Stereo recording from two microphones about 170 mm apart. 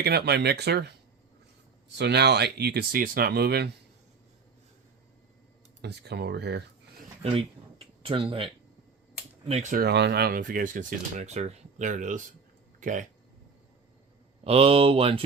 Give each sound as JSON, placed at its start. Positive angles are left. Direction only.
{"t": 0.0, "sound": "speech", "side_deg": -70}
{"t": 2.0, "sound": "speech", "side_deg": -80}
{"t": 5.8, "sound": "speech", "side_deg": -75}
{"t": 7.2, "sound": "speech", "side_deg": -35}
{"t": 9.5, "sound": "speech", "side_deg": -45}
{"t": 9.8, "sound": "speech", "side_deg": -85}
{"t": 14.4, "sound": "speech", "side_deg": -35}